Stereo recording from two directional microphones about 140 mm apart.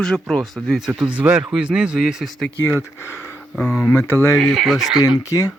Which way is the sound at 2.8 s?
15° left (ahead or behind).